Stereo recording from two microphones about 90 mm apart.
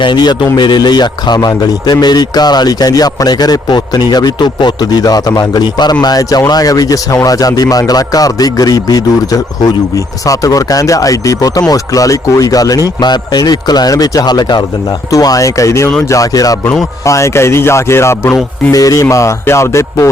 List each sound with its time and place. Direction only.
0.0 s a man's voice: 60° left (ahead or behind); by 18.3 s 30° left (ahead or behind)
18.7 s speech: 40° left (ahead or behind)